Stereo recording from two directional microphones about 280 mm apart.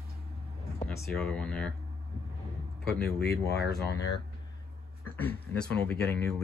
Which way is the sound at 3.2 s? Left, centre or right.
Left.